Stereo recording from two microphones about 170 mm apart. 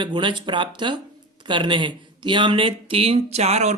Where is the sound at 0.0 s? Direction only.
30° right (ahead or behind).